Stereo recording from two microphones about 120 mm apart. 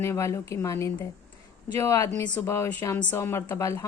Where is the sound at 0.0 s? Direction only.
25° left (ahead or behind).